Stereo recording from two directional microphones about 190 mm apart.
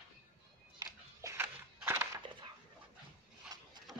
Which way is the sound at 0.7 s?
15° right (ahead or behind).